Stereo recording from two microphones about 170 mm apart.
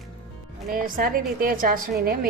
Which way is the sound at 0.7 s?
55° right (ahead or behind).